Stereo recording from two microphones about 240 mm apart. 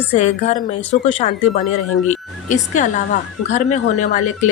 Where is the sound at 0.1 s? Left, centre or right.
Left.